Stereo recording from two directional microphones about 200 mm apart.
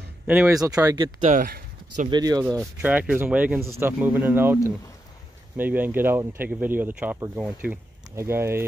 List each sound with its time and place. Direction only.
0.3 s speech: 15° right (ahead or behind)
1.2 s speech: 40° right (ahead or behind)
2.0 s speech: 20° right (ahead or behind)
5.6 s speech: 10° right (ahead or behind)